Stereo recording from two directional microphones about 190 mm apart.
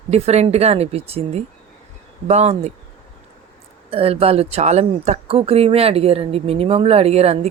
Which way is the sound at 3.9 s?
30° right (ahead or behind).